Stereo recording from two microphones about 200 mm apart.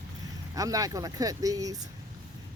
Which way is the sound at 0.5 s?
15° right (ahead or behind).